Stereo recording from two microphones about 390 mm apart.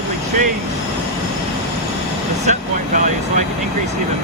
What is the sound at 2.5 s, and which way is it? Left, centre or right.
Speech, centre.